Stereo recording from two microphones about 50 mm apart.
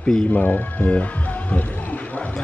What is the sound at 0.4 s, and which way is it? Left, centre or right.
Music, left.